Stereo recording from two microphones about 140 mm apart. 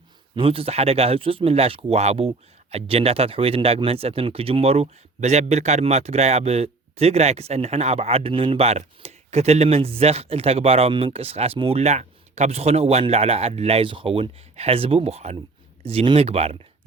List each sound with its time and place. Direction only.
0.3 s speech: 40° right (ahead or behind)